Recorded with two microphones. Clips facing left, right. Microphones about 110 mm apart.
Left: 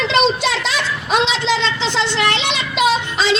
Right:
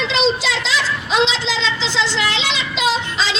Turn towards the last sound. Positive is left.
turn(degrees=60)  # may be behind; listen again after turning